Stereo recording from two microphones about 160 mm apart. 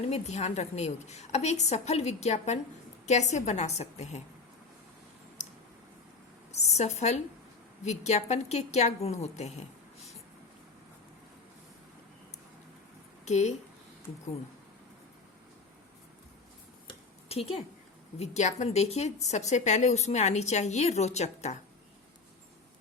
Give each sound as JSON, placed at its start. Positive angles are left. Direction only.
{"t": 0.1, "sound": "a woman's voice", "side_deg": 45}
{"t": 6.5, "sound": "a woman's voice", "side_deg": 45}
{"t": 13.2, "sound": "a woman's voice", "side_deg": 45}
{"t": 16.8, "sound": "a sound", "side_deg": 40}
{"t": 18.2, "sound": "a woman's voice", "side_deg": 45}